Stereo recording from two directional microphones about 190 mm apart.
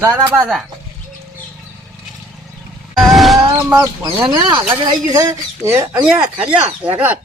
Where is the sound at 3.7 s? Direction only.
25° right (ahead or behind).